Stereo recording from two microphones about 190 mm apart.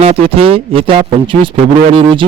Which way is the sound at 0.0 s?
30° right (ahead or behind).